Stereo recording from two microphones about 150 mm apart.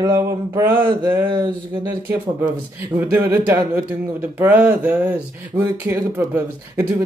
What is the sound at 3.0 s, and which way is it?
Speech, 15° right (ahead or behind).